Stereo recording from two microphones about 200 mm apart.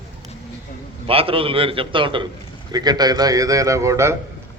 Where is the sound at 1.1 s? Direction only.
30° right (ahead or behind).